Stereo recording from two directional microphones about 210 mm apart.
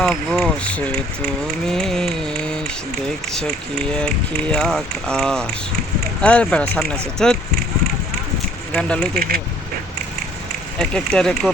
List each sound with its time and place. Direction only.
0.0 s speech: centre (ahead or behind)
3.9 s speech: 5° left (ahead or behind)
8.7 s speech: 5° left (ahead or behind)
9.1 s speech: 45° right (ahead or behind)
10.8 s speech: 5° left (ahead or behind)